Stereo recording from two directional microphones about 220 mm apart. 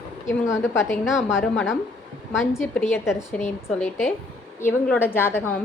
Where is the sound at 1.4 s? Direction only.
Centre (ahead or behind).